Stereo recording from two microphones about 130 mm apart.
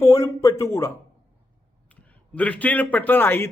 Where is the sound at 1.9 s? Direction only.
10° left (ahead or behind).